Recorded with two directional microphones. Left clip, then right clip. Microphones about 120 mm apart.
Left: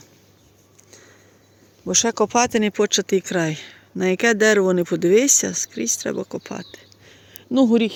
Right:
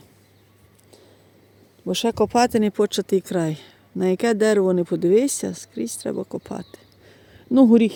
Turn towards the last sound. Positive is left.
turn(degrees=-90)